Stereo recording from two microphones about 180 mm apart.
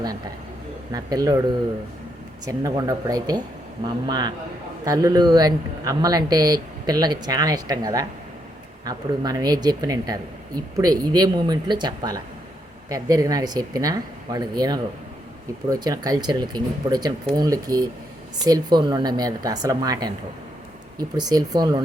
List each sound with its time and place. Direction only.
0.9 s speech: 20° right (ahead or behind)